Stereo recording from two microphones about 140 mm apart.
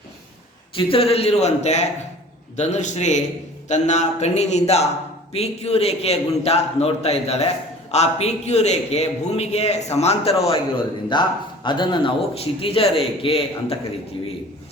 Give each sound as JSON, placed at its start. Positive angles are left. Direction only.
{"t": 0.8, "sound": "a man's voice", "side_deg": 40}
{"t": 11.1, "sound": "a man's voice", "side_deg": 30}